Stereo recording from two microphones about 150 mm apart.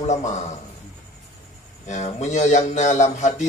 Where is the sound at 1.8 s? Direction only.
50° left (ahead or behind).